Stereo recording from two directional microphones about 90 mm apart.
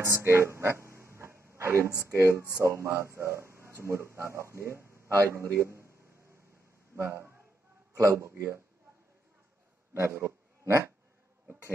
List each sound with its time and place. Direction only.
0.0 s speech: 30° right (ahead or behind)
7.0 s a man's voice: 30° right (ahead or behind)
9.9 s speech: 30° right (ahead or behind)